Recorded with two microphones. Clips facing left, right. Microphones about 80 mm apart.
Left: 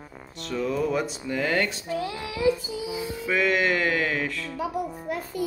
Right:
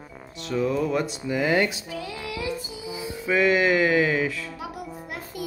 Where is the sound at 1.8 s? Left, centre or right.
Left.